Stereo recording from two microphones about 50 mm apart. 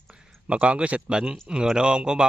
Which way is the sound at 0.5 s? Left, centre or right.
Right.